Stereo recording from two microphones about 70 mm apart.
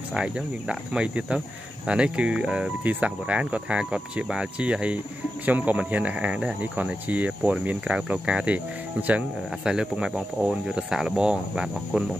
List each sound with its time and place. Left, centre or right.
0.1 s speech: centre
9.7 s speech: centre